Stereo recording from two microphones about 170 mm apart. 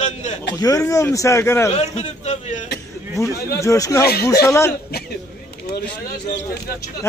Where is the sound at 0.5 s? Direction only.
20° left (ahead or behind).